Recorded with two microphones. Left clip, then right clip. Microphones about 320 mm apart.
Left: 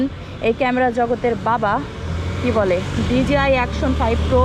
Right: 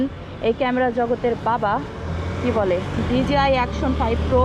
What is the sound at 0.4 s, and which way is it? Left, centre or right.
Speech, centre.